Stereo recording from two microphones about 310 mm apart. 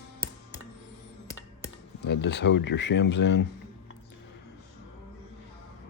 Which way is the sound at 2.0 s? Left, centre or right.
Left.